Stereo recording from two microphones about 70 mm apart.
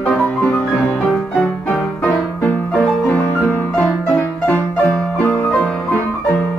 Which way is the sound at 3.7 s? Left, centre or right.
Centre.